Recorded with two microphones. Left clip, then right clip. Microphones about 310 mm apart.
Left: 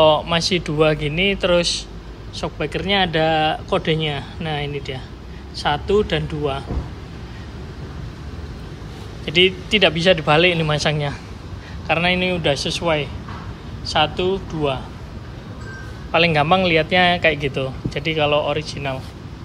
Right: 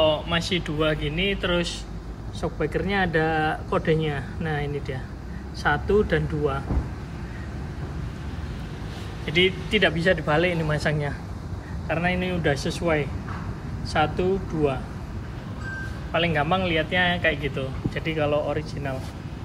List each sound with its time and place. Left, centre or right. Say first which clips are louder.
0.0 s speech: left 7 dB; left
9.2 s speech: left 6 dB; centre
16.1 s speech: left 7 dB; left